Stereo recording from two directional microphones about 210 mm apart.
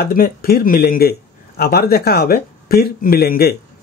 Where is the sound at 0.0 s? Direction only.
45° left (ahead or behind).